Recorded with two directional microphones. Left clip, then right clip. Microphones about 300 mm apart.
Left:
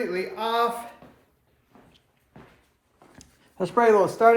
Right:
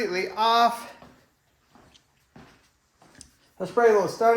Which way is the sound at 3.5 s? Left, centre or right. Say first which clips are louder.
Left 1 dB; left.